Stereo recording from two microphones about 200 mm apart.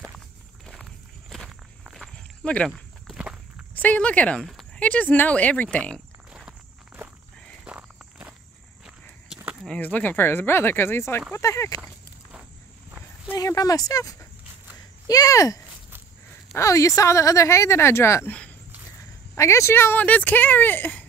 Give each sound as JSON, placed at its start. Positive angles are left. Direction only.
{"t": 0.7, "sound": "walk", "side_deg": 0}
{"t": 3.7, "sound": "speech", "side_deg": 10}
{"t": 7.6, "sound": "walk", "side_deg": -5}
{"t": 9.3, "sound": "a sound", "side_deg": -5}
{"t": 9.7, "sound": "speech", "side_deg": 10}
{"t": 13.3, "sound": "speech", "side_deg": 15}